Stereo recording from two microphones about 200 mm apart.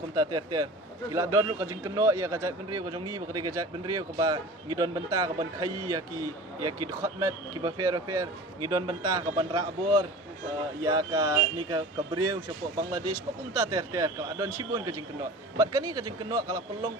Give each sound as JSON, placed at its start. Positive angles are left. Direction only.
{"t": 0.2, "sound": "speech", "side_deg": -20}
{"t": 10.8, "sound": "speech", "side_deg": -20}